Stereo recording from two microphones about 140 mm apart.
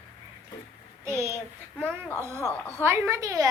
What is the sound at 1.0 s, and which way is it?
A child's voice, 20° right (ahead or behind).